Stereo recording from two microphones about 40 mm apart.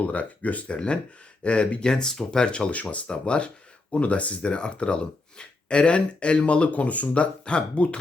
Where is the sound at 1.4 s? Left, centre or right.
Left.